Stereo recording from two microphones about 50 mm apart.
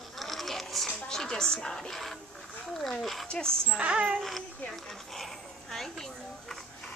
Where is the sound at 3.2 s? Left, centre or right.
Centre.